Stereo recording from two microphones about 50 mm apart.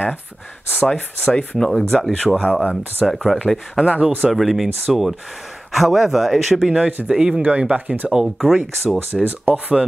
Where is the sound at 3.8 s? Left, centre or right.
Centre.